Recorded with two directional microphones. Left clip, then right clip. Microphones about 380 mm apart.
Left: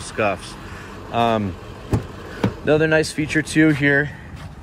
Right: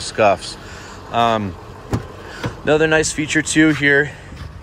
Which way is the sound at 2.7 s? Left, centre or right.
Centre.